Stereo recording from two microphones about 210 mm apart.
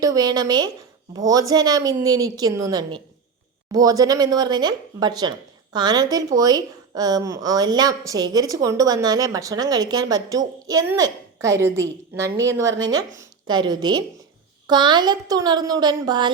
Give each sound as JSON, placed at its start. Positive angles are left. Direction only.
{"t": 0.0, "sound": "a woman's voice", "side_deg": -15}